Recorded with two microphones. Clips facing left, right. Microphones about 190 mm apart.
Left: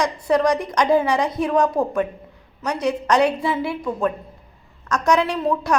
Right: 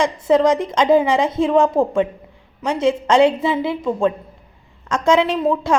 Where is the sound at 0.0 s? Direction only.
20° right (ahead or behind).